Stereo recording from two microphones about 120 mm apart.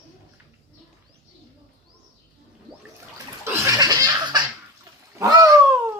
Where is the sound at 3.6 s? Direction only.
30° right (ahead or behind).